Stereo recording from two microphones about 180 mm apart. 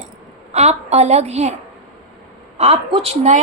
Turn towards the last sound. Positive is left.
turn(degrees=-35)  # may be behind; listen again after turning